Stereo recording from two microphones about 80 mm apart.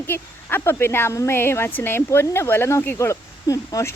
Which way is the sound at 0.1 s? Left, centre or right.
Left.